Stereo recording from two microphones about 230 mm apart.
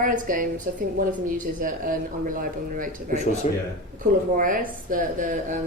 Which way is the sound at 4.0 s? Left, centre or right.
Right.